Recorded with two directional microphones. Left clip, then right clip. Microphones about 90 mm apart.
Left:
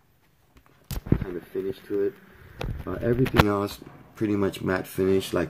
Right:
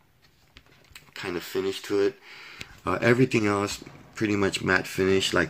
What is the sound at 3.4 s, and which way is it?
Speech, 10° left (ahead or behind).